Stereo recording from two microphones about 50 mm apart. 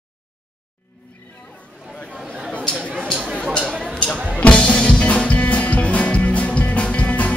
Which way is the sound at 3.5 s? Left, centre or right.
Centre.